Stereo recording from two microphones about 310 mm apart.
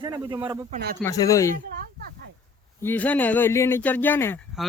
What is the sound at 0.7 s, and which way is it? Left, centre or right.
Speech, right.